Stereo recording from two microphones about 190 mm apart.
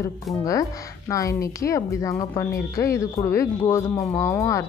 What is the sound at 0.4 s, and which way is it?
Speech, 15° left (ahead or behind).